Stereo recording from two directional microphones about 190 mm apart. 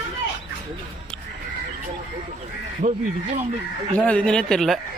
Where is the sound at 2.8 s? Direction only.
45° right (ahead or behind).